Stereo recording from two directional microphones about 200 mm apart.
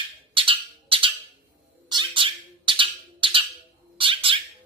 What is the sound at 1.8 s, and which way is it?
Cat, 25° right (ahead or behind).